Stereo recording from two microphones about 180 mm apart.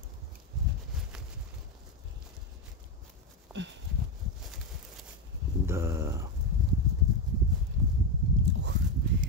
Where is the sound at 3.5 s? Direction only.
5° right (ahead or behind).